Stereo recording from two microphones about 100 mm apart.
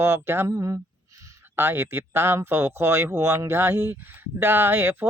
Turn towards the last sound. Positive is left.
turn(degrees=-20)  # may be behind; listen again after turning